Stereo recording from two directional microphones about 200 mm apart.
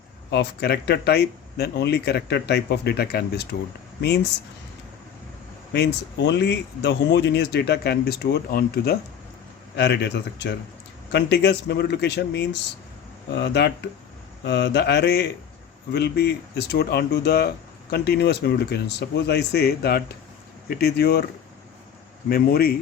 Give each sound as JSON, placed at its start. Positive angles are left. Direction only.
{"t": 0.3, "sound": "speech", "side_deg": 55}
{"t": 5.7, "sound": "speech", "side_deg": 60}
{"t": 22.3, "sound": "speech", "side_deg": 50}